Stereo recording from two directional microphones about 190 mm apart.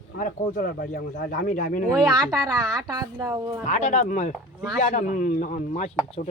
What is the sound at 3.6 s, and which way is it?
Speech, 40° left (ahead or behind).